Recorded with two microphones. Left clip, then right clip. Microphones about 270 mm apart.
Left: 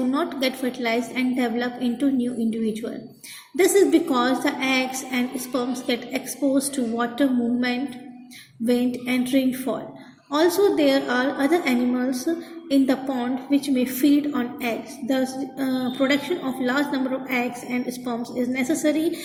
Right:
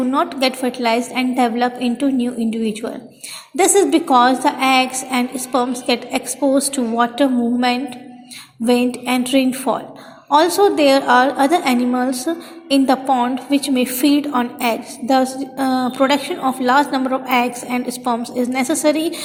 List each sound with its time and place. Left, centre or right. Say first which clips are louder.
0.1 s a woman's voice: right 7 dB; centre
9.0 s a woman's voice: right 5 dB; centre